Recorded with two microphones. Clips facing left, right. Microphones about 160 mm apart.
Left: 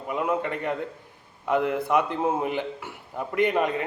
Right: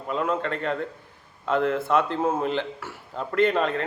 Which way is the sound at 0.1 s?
15° left (ahead or behind).